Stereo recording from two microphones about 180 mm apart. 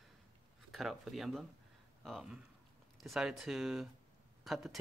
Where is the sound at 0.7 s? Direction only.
Centre (ahead or behind).